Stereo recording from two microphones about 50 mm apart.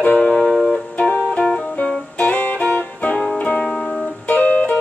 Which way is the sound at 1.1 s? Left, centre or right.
Left.